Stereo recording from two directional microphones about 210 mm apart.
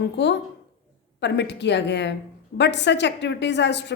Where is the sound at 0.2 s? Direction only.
55° left (ahead or behind).